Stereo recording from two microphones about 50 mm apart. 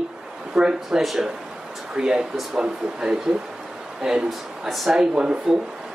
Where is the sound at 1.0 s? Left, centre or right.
Centre.